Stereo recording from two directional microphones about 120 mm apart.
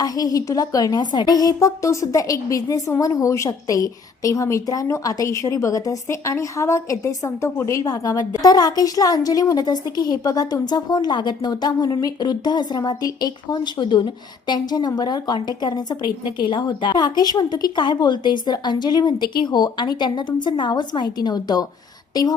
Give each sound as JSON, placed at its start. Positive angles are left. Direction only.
{"t": 0.0, "sound": "a woman's voice", "side_deg": 30}